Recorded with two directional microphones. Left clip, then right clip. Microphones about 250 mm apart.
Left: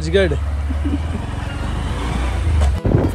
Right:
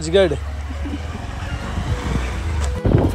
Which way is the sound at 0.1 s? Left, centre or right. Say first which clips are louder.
Right 1 dB; centre.